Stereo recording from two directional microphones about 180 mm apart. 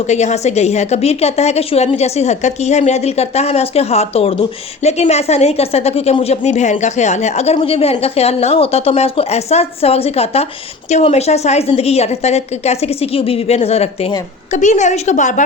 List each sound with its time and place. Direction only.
0.1 s a woman's voice: 40° left (ahead or behind)